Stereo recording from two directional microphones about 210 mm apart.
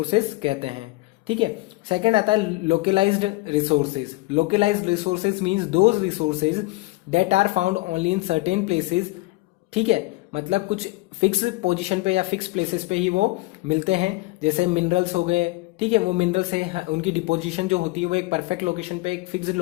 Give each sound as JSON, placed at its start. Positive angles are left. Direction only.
{"t": 0.1, "sound": "speech", "side_deg": -25}
{"t": 1.9, "sound": "speech", "side_deg": -25}